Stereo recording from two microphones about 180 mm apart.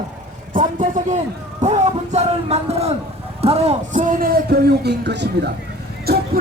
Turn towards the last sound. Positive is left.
turn(degrees=-60)  # may be behind; listen again after turning